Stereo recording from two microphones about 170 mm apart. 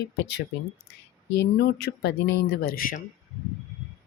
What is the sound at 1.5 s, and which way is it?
Speech, 75° left (ahead or behind).